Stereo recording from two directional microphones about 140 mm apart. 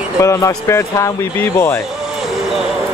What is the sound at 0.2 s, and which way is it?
Speech, 20° left (ahead or behind).